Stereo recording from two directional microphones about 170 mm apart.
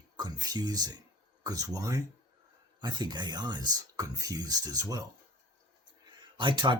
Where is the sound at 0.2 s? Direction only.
20° right (ahead or behind).